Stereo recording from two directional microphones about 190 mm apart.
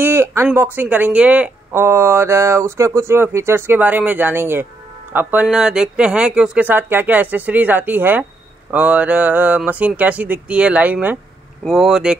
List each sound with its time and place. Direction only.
0.0 s speech: 15° right (ahead or behind)